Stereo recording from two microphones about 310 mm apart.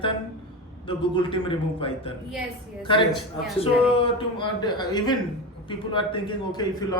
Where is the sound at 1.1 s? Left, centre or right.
Centre.